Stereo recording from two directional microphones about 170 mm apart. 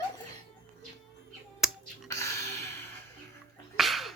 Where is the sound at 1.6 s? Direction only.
5° right (ahead or behind).